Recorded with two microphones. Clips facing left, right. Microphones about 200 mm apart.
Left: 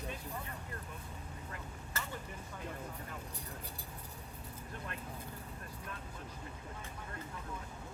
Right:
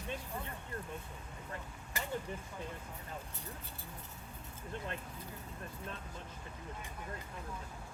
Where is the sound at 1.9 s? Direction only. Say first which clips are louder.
Right 2 dB; 15° right (ahead or behind).